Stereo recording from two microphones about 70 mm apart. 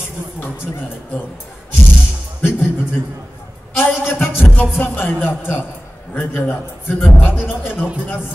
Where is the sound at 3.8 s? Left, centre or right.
Left.